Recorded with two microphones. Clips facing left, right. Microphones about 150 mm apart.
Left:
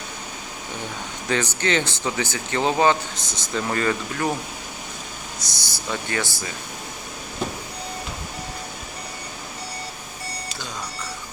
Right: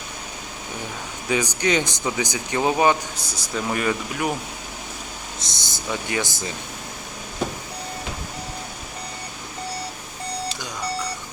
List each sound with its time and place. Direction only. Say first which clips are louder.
1.3 s speech: right 1 dB; 10° right (ahead or behind)
5.4 s speech: right 1 dB; 20° right (ahead or behind)